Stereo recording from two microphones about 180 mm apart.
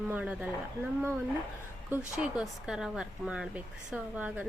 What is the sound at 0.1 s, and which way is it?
Speech, 5° right (ahead or behind).